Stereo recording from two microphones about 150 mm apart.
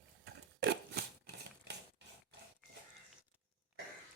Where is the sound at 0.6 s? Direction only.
90° right.